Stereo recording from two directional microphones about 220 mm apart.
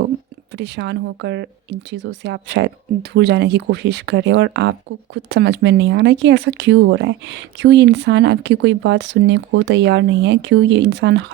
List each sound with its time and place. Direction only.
0.5 s speech: 50° right (ahead or behind)